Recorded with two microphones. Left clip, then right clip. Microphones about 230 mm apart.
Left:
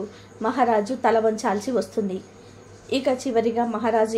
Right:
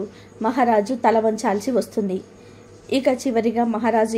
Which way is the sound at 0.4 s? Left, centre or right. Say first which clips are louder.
Right 2 dB; centre.